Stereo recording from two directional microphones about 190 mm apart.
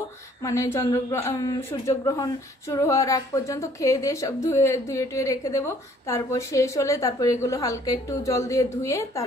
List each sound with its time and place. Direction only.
0.4 s a woman's voice: 15° left (ahead or behind)